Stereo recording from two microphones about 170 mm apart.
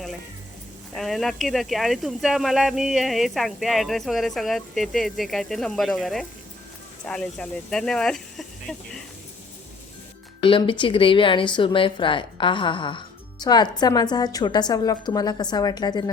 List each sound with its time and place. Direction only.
0.9 s speech: centre (ahead or behind)
10.4 s speech: 30° left (ahead or behind)